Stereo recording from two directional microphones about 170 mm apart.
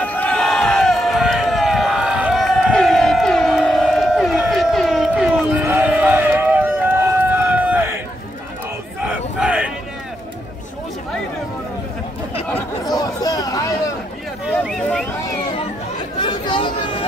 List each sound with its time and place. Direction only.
0.0 s crowd: 10° left (ahead or behind); by 7.9 s 10° right (ahead or behind)
9.0 s battle cry: 5° right (ahead or behind)
12.4 s chatter: 5° left (ahead or behind)
12.9 s a sound: 20° left (ahead or behind)
14.4 s a sound: centre (ahead or behind)
16.2 s chatter: 25° left (ahead or behind)